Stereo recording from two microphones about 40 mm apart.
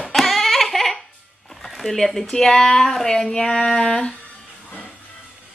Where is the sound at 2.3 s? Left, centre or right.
Centre.